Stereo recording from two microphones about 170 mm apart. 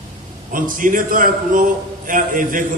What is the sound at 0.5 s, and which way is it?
A man's voice, 55° right (ahead or behind).